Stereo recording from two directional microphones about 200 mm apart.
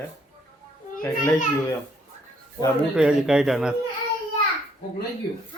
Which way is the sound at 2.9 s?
5° right (ahead or behind).